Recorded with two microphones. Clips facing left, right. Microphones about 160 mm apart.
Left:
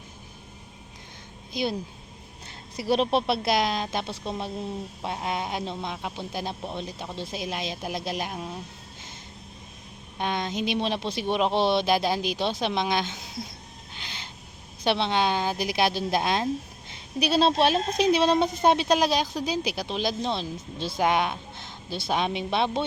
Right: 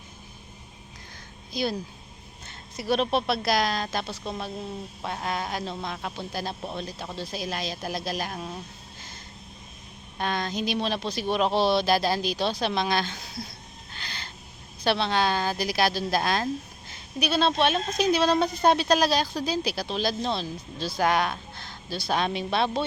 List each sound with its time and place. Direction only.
1.5 s a woman's voice: 20° left (ahead or behind)
2.8 s a woman's voice: 30° left (ahead or behind)
10.2 s a woman's voice: 20° left (ahead or behind)
13.9 s owl: 20° left (ahead or behind)
14.8 s a woman's voice: 20° left (ahead or behind)
17.2 s a woman's voice: 30° left (ahead or behind)